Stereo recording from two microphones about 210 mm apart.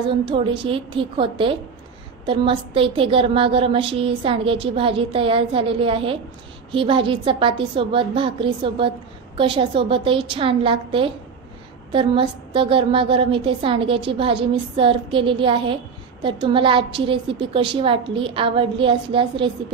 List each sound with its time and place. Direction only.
0.1 s a woman's voice: 25° right (ahead or behind)